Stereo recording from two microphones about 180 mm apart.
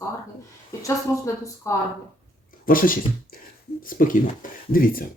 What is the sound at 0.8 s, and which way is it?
Speech, 15° left (ahead or behind).